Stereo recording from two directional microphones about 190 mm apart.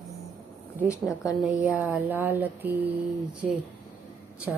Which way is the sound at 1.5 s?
5° right (ahead or behind).